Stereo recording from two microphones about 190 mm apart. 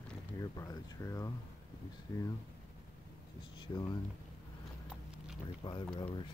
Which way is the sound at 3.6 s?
20° left (ahead or behind).